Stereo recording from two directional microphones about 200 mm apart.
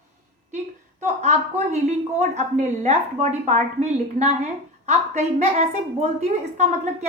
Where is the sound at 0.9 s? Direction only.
35° right (ahead or behind).